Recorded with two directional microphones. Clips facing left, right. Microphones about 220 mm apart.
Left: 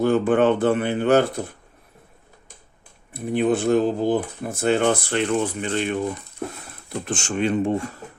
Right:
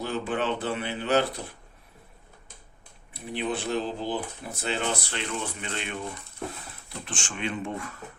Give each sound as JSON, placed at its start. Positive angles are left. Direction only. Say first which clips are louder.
{"t": 0.0, "sound": "speech", "louder": "left 11 dB", "side_deg": 50}
{"t": 3.1, "sound": "speech", "louder": "left 10 dB", "side_deg": 50}
{"t": 7.0, "sound": "speech", "louder": "left 10 dB", "side_deg": 40}